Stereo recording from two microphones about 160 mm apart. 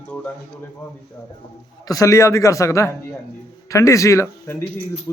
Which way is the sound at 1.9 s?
20° left (ahead or behind).